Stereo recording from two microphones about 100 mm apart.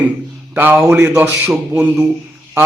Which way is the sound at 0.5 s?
20° right (ahead or behind).